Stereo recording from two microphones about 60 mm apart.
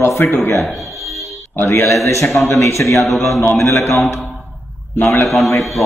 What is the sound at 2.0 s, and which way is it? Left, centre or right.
A man's voice, left.